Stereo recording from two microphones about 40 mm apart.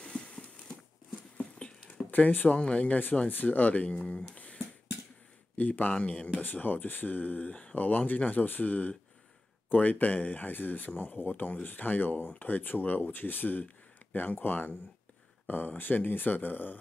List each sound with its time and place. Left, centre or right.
0.0 s a sound: left
2.0 s speech: left
3.3 s speech: left
5.6 s speech: left
6.0 s speech: left
6.4 s speech: left